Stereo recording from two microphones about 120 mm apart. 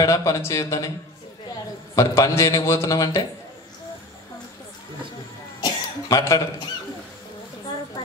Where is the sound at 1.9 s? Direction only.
25° left (ahead or behind).